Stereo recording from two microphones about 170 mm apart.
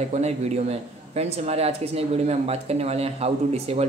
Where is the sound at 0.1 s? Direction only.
40° right (ahead or behind).